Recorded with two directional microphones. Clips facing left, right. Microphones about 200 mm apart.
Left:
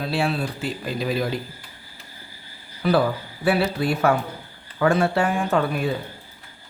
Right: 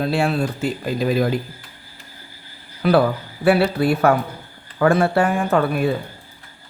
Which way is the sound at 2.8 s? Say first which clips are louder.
Right 4 dB; 60° right (ahead or behind).